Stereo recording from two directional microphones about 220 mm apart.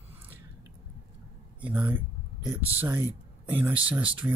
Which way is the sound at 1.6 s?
5° right (ahead or behind).